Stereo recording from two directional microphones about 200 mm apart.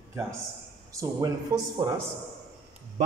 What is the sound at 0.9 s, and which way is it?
A man's voice, 15° right (ahead or behind).